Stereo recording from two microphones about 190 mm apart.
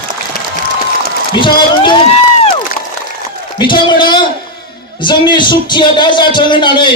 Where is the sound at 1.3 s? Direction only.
25° left (ahead or behind).